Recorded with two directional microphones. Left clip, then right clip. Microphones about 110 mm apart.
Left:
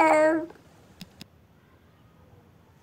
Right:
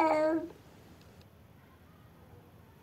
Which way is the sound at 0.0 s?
75° left (ahead or behind).